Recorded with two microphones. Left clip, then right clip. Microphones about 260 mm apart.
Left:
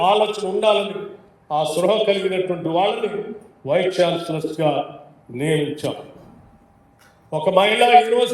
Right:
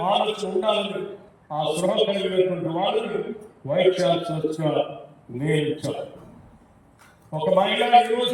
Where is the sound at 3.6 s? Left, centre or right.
Left.